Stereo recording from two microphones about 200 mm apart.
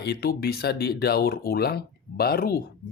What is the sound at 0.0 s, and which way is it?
Speech, 55° left (ahead or behind).